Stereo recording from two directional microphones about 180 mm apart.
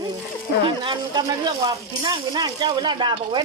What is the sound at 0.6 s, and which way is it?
Speech, 25° right (ahead or behind).